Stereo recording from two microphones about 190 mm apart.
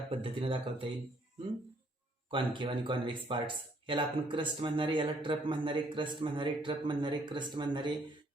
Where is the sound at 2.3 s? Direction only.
25° right (ahead or behind).